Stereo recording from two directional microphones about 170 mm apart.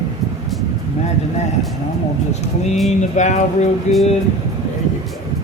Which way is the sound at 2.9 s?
45° left (ahead or behind).